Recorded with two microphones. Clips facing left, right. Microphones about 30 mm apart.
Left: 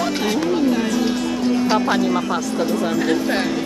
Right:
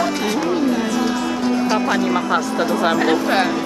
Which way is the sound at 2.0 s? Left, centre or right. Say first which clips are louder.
Right 2 dB; centre.